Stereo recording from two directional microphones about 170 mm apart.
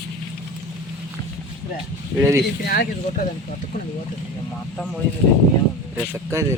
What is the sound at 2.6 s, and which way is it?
Speech, 60° left (ahead or behind).